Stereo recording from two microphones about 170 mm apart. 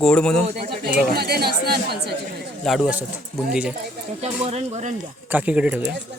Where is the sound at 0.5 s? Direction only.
65° right (ahead or behind).